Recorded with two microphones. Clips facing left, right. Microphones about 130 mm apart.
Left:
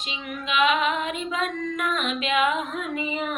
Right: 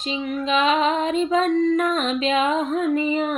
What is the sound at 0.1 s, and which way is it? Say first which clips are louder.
Female singing: right 7 dB; 35° right (ahead or behind).